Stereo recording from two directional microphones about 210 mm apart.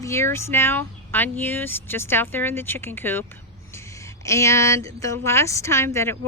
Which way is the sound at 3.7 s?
15° left (ahead or behind).